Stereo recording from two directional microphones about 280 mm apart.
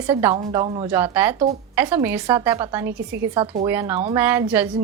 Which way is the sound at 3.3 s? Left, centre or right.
Centre.